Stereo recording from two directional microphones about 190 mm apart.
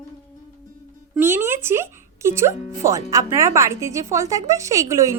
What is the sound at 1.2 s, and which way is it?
Speech, 10° right (ahead or behind).